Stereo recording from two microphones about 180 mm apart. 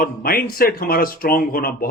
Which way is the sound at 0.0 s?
55° left (ahead or behind).